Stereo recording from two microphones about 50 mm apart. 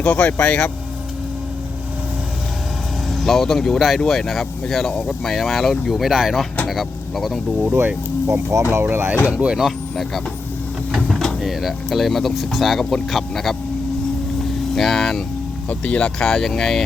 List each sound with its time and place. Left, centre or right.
0.0 s speech: left
3.1 s speech: centre
7.6 s speech: right
8.3 s speech: right
8.8 s speech: right
9.2 s speech: right
9.9 s speech: centre
11.3 s speech: centre
14.8 s speech: centre
15.7 s speech: left